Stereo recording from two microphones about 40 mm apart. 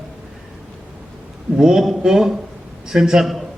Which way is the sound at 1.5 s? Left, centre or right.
Centre.